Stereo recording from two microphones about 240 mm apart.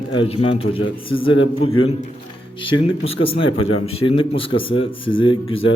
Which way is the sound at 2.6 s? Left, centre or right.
Left.